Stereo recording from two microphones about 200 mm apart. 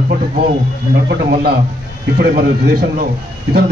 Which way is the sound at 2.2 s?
50° right (ahead or behind).